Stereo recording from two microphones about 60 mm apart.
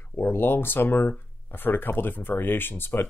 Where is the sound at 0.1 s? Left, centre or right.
Left.